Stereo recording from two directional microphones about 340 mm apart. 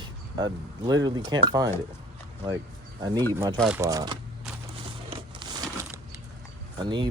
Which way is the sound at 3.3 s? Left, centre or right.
Centre.